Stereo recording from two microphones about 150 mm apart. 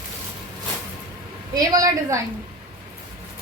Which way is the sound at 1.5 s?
25° right (ahead or behind).